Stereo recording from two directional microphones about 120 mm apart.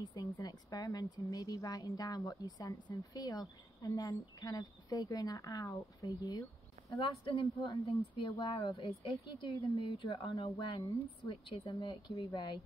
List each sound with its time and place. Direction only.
0.0 s a woman's voice: 35° left (ahead or behind)
7.0 s a woman's voice: 45° left (ahead or behind)